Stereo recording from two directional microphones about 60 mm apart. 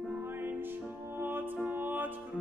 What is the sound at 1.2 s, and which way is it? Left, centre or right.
Music, right.